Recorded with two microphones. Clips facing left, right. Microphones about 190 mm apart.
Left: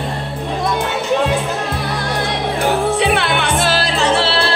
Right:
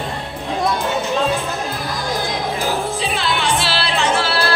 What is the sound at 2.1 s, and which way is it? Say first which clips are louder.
Music: left 3 dB; 70° left (ahead or behind).